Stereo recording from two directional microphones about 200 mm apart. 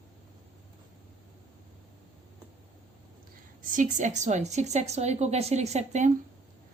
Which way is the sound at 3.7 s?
40° right (ahead or behind).